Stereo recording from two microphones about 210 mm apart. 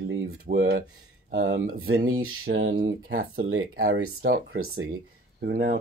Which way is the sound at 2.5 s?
65° right (ahead or behind).